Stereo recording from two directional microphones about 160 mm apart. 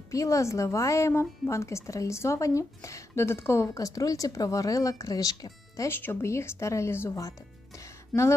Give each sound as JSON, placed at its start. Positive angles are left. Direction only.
{"t": 0.1, "sound": "speech", "side_deg": 20}